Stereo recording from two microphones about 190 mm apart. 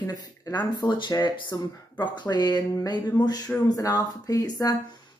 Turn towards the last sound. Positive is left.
turn(degrees=20)  # may be behind; listen again after turning